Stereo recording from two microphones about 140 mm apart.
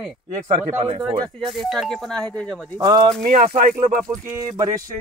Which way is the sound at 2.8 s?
25° right (ahead or behind).